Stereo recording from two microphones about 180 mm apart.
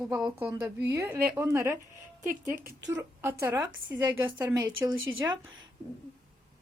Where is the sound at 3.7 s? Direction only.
90° right.